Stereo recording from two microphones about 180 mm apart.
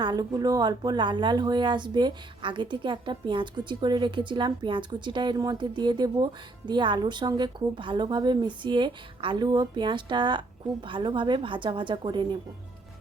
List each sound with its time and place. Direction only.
0.0 s speech: 20° right (ahead or behind)